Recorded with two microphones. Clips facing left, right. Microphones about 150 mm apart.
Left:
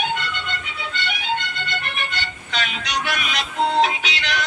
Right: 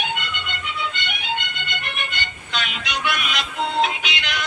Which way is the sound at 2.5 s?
40° left (ahead or behind).